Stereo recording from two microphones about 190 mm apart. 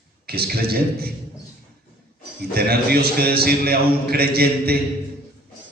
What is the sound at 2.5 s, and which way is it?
A man's voice, 55° right (ahead or behind).